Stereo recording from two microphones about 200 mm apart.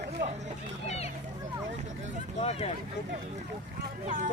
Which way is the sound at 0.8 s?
30° left (ahead or behind).